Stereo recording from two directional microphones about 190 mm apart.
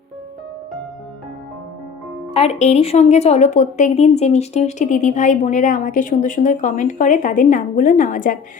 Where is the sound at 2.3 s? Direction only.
35° left (ahead or behind).